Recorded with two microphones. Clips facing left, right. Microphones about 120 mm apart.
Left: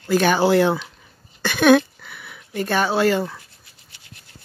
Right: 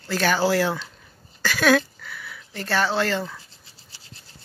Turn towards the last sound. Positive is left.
turn(degrees=10)  # may be behind; listen again after turning